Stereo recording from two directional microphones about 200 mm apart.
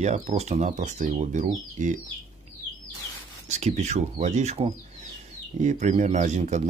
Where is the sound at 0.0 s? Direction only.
35° right (ahead or behind).